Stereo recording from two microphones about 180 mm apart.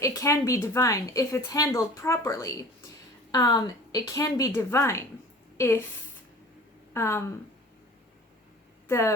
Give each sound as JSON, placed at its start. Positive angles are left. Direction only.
{"t": 0.0, "sound": "a woman's voice", "side_deg": 15}
{"t": 6.9, "sound": "a woman's voice", "side_deg": 15}
{"t": 8.9, "sound": "a woman's voice", "side_deg": 15}